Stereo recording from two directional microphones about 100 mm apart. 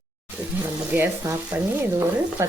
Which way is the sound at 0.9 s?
20° right (ahead or behind).